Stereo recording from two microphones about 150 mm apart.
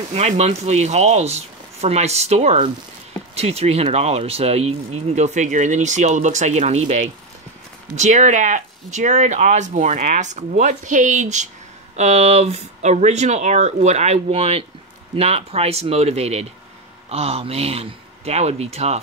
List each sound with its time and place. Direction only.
0.1 s speech: 45° right (ahead or behind)